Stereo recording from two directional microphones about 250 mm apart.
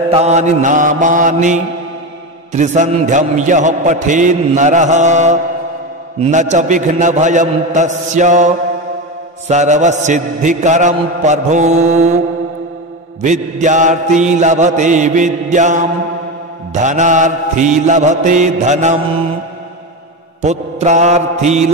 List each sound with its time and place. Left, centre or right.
0.1 s a man's voice: right
13.2 s a man's voice: right
20.4 s a man's voice: right